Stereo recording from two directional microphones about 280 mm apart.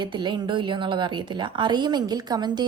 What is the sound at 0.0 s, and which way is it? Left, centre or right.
A woman's voice, centre.